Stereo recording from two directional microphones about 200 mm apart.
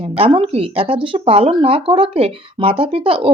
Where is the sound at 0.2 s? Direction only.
30° right (ahead or behind).